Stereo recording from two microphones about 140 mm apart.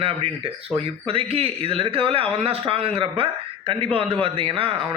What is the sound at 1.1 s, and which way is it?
A man's voice, 45° right (ahead or behind).